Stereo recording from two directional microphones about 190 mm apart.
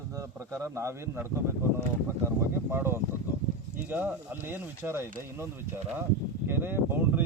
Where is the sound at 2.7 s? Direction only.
10° right (ahead or behind).